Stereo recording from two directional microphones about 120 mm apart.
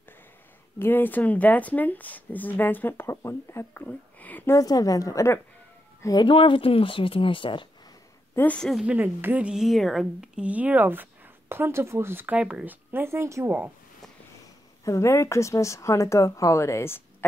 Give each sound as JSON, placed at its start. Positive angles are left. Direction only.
{"t": 0.7, "sound": "speech", "side_deg": 15}
{"t": 4.6, "sound": "speech", "side_deg": 30}
{"t": 6.2, "sound": "a woman's voice", "side_deg": 45}
{"t": 8.4, "sound": "speech", "side_deg": 10}
{"t": 8.8, "sound": "a woman's voice", "side_deg": -15}
{"t": 14.9, "sound": "speech", "side_deg": 25}